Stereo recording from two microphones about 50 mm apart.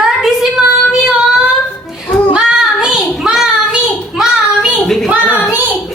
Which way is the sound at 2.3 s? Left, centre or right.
Centre.